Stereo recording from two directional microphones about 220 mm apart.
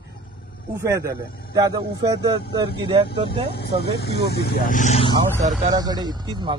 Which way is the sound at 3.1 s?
45° left (ahead or behind).